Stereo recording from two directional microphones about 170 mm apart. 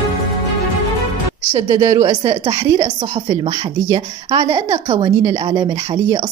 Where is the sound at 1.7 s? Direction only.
20° right (ahead or behind).